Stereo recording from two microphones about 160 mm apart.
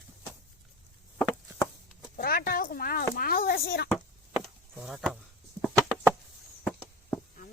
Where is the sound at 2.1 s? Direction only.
65° left (ahead or behind).